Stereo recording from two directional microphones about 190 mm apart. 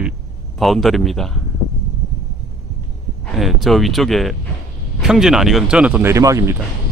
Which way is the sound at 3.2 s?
Centre (ahead or behind).